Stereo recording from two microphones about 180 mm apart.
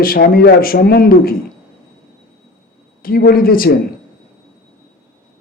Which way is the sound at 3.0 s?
55° left (ahead or behind).